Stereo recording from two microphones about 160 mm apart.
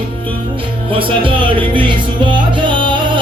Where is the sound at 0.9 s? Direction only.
35° right (ahead or behind).